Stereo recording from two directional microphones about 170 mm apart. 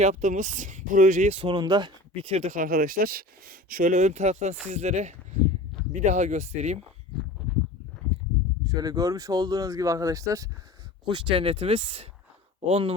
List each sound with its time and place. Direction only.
0.0 s speech: 45° right (ahead or behind)
8.6 s speech: 20° right (ahead or behind); by 12.9 s 35° right (ahead or behind)